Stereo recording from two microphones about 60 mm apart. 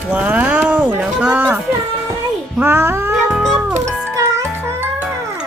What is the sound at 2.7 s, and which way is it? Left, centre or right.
Cat, right.